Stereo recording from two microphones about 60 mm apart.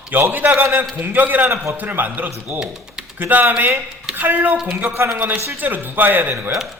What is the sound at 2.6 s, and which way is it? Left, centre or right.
Speech, centre.